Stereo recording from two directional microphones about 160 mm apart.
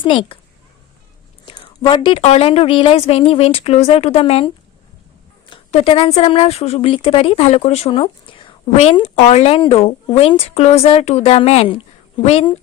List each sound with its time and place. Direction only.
0.0 s speech: 30° left (ahead or behind)
1.5 s speech: 30° left (ahead or behind)
5.7 s speech: 35° left (ahead or behind)